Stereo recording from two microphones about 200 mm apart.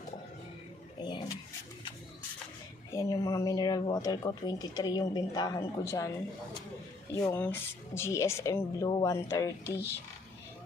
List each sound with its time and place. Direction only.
2.9 s speech: 15° left (ahead or behind)
7.1 s speech: 15° left (ahead or behind)
9.6 s speech: 55° left (ahead or behind)